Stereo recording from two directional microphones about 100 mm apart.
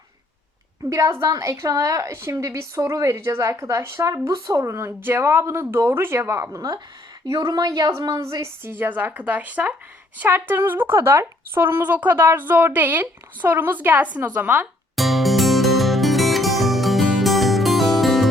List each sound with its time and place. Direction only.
0.9 s a woman's voice: 30° right (ahead or behind)
7.3 s a woman's voice: 45° right (ahead or behind); by 14.7 s 20° right (ahead or behind)
14.9 s music: centre (ahead or behind)